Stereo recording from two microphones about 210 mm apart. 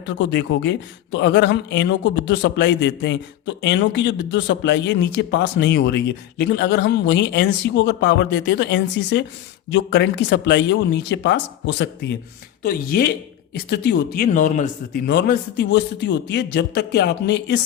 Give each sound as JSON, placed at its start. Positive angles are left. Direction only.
{"t": 0.2, "sound": "speech", "side_deg": 60}
{"t": 12.6, "sound": "a man's voice", "side_deg": 45}
{"t": 15.0, "sound": "a man's voice", "side_deg": 50}